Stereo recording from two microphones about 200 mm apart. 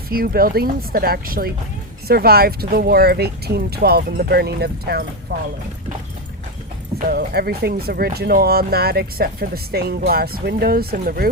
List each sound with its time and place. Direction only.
0.1 s speech: 45° right (ahead or behind)
7.1 s speech: 50° right (ahead or behind)